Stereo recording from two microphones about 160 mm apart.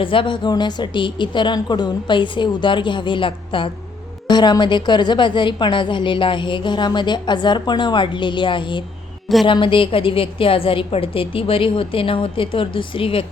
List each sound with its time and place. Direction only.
0.0 s a woman's voice: 30° left (ahead or behind)